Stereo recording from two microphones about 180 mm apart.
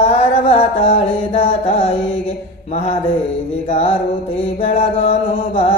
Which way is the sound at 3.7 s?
35° left (ahead or behind).